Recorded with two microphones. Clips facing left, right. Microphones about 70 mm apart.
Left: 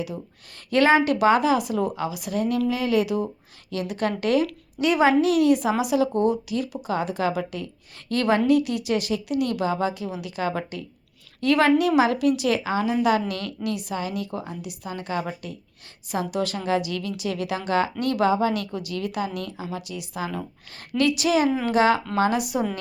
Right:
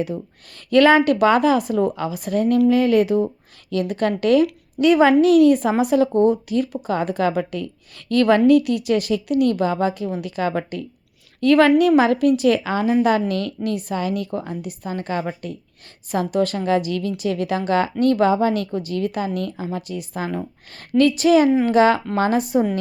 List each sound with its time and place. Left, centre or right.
0.7 s a woman's voice: right